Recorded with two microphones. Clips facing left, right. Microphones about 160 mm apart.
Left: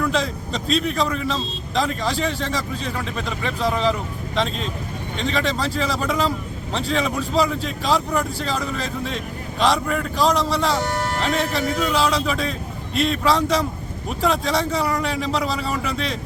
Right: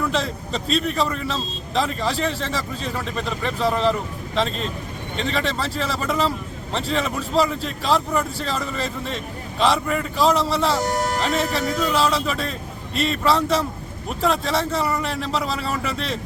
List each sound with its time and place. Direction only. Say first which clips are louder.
0.1 s a man's voice: left 1 dB; centre (ahead or behind)
10.8 s speech: right 2 dB; 40° right (ahead or behind)
11.2 s a man's voice: even; centre (ahead or behind)